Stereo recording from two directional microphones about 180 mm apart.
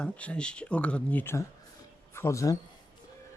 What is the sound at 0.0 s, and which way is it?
Speech, 5° left (ahead or behind).